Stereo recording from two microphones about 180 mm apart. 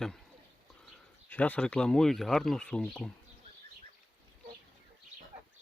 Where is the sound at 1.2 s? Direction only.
10° left (ahead or behind).